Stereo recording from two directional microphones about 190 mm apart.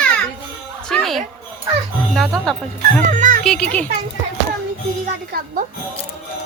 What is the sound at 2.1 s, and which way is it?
Speech, centre (ahead or behind).